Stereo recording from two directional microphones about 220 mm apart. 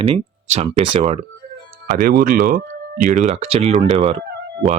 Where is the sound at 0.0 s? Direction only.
25° right (ahead or behind).